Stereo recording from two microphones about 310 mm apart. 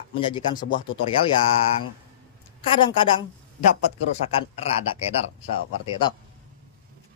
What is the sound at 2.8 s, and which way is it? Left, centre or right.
Speech, centre.